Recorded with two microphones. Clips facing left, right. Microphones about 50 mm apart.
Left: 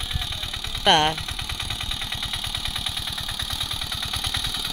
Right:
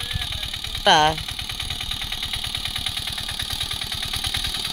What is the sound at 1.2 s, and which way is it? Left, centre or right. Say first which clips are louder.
Vehicle: even; left.